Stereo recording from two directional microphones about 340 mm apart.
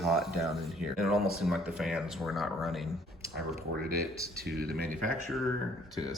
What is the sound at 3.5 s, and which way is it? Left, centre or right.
Speech, right.